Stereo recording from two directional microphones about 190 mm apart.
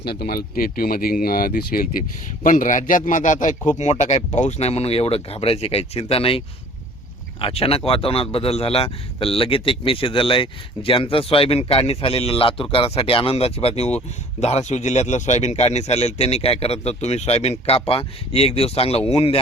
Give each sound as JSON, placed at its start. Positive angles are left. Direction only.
{"t": 0.0, "sound": "speech", "side_deg": 55}
{"t": 7.4, "sound": "speech", "side_deg": 30}